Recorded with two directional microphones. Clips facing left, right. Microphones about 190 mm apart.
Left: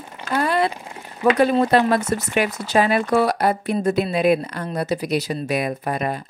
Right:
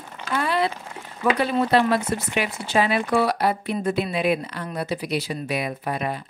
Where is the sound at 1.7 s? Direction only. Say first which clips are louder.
Left 2 dB; 45° left (ahead or behind).